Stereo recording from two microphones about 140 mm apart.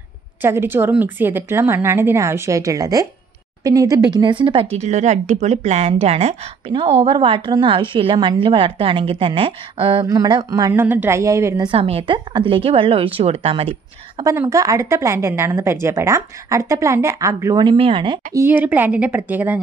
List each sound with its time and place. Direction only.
0.4 s a woman's voice: 15° right (ahead or behind); by 4.6 s 40° right (ahead or behind)
4.7 s a woman's voice: 55° right (ahead or behind)
10.0 s a woman's voice: 25° right (ahead or behind)
10.7 s a woman's voice: 15° right (ahead or behind)
11.6 s speech: 40° right (ahead or behind)
14.5 s a woman's voice: 20° right (ahead or behind)
17.7 s a woman's voice: 40° right (ahead or behind)
18.3 s a woman's voice: 15° right (ahead or behind)